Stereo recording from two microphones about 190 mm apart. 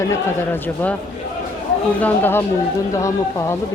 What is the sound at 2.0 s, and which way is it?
A woman's voice, 10° left (ahead or behind).